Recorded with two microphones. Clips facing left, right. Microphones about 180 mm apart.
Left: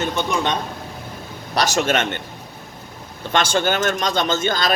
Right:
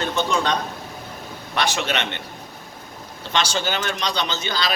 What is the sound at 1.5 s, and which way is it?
Speech, 40° left (ahead or behind).